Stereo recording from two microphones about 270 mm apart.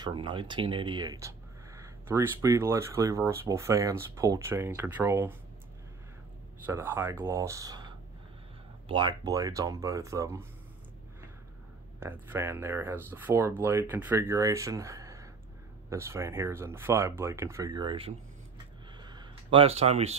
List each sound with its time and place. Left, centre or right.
0.0 s speech: centre
6.6 s speech: centre
12.0 s speech: centre
18.9 s a sound: centre